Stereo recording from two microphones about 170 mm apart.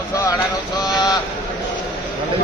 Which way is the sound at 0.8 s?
20° left (ahead or behind).